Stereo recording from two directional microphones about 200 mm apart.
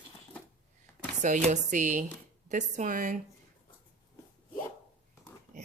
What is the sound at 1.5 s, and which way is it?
Speech, 40° right (ahead or behind).